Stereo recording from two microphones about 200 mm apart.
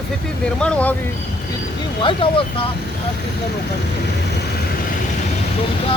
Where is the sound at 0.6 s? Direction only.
5° left (ahead or behind).